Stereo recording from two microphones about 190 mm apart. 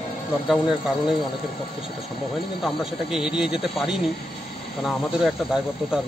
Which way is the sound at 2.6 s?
Centre (ahead or behind).